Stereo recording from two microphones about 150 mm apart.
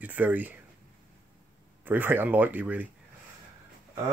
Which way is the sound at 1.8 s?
15° right (ahead or behind).